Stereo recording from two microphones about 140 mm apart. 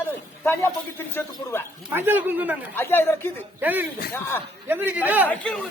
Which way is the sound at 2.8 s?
15° left (ahead or behind).